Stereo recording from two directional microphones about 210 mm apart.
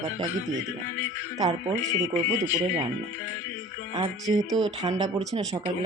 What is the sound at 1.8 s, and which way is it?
Speech, 15° left (ahead or behind).